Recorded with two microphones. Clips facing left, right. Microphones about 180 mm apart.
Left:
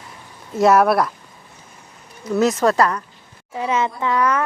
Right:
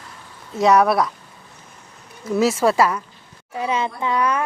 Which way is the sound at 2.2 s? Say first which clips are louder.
Left 1 dB; 5° right (ahead or behind).